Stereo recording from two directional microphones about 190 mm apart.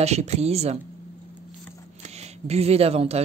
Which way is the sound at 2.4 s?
35° right (ahead or behind).